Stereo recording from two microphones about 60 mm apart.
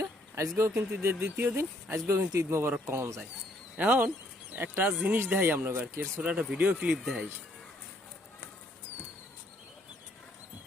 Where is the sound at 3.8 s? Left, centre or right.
Right.